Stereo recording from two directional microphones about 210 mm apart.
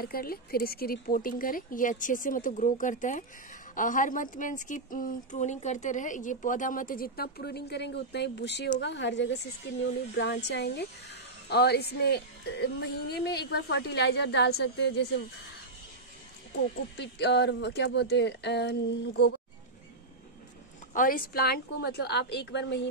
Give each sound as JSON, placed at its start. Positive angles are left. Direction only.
{"t": 0.0, "sound": "speech", "side_deg": 45}
{"t": 16.9, "sound": "speech", "side_deg": 55}
{"t": 20.9, "sound": "speech", "side_deg": 40}